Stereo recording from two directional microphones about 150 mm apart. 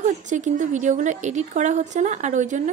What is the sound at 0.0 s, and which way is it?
A woman's voice, 55° right (ahead or behind).